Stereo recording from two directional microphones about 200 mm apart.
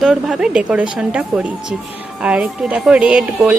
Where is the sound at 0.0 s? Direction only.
Centre (ahead or behind).